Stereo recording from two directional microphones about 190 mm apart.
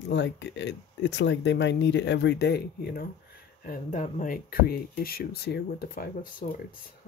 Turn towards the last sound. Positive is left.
turn(degrees=50)  # may be behind; listen again after turning